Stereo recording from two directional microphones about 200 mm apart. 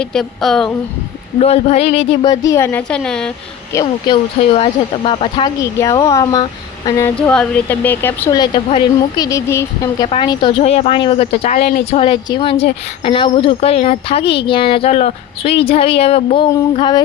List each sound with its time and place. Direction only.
0.0 s a woman's voice: centre (ahead or behind)
1.4 s speech: 30° left (ahead or behind); by 3.3 s 5° left (ahead or behind)
3.7 s speech: 20° left (ahead or behind)
7.2 s speech: 5° left (ahead or behind)
8.4 s speech: 25° left (ahead or behind)
10.1 s speech: 25° left (ahead or behind)